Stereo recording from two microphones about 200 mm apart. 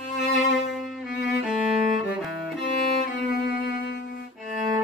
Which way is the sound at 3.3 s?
50° left (ahead or behind).